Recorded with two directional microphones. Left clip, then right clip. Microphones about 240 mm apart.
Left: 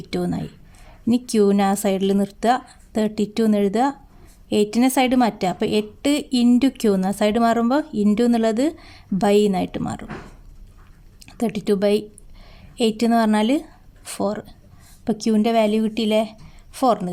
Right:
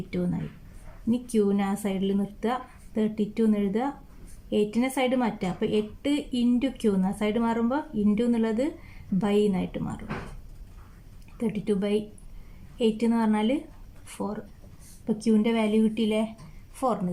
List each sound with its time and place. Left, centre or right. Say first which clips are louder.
0.1 s a woman's voice: left 7 dB; left
11.3 s a woman's voice: left 7 dB; left